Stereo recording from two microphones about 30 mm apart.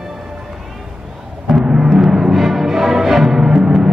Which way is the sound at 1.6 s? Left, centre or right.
Right.